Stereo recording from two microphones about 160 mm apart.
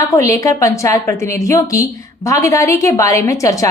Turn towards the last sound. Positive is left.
turn(degrees=20)  # may be behind; listen again after turning